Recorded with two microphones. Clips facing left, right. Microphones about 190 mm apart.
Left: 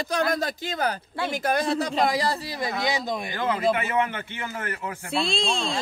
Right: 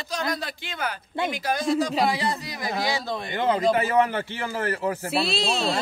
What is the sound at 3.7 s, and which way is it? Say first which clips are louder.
Speech: right 3 dB; 35° right (ahead or behind).